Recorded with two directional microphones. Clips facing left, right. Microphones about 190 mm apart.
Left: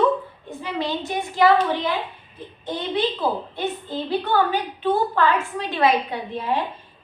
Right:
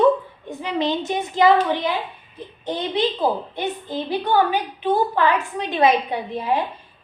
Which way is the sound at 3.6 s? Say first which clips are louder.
Right 1 dB; 15° right (ahead or behind).